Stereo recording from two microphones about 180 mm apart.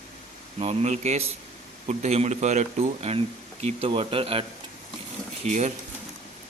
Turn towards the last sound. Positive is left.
turn(degrees=-40)  # may be behind; listen again after turning